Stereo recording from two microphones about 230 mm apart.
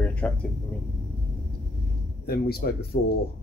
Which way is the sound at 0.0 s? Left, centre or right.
Centre.